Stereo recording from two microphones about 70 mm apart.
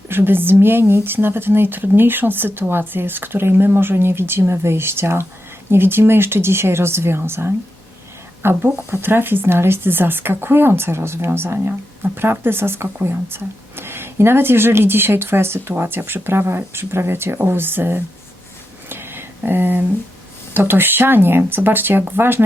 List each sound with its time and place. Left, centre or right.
0.1 s speech: right
18.9 s a sound: right
20.5 s speech: right